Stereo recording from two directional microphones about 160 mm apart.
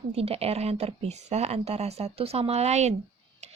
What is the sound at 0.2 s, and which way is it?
Speech, 40° right (ahead or behind).